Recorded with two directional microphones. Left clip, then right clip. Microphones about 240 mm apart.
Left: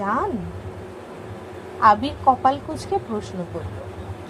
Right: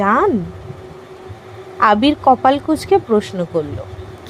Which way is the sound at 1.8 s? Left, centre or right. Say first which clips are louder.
Right 4 dB; right.